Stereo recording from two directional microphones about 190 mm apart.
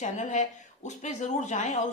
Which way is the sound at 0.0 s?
40° left (ahead or behind).